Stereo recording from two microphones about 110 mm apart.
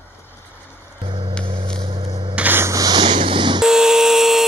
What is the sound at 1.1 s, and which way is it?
Music, 45° right (ahead or behind).